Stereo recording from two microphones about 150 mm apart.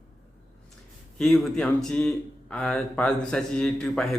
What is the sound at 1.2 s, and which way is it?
Speech, centre (ahead or behind).